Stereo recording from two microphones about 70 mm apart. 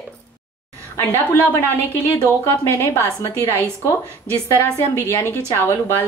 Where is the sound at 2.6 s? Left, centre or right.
Left.